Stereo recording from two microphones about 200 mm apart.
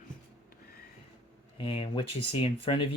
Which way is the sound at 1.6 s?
25° left (ahead or behind).